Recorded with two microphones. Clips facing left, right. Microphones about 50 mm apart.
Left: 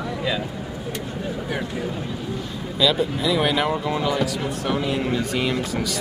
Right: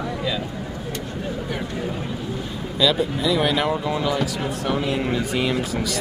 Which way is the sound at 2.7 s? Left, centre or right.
Centre.